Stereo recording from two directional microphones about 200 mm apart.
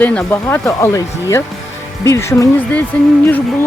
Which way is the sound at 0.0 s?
5° left (ahead or behind).